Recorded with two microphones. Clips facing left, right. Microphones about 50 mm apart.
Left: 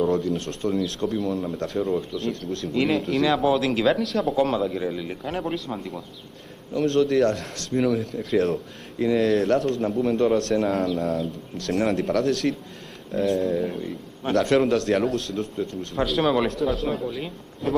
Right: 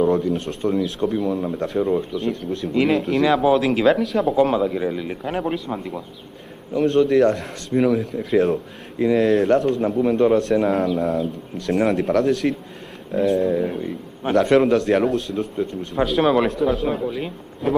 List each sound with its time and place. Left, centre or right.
0.2 s a man's voice: centre